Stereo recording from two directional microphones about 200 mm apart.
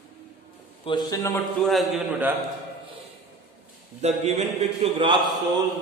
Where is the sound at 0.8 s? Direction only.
20° left (ahead or behind).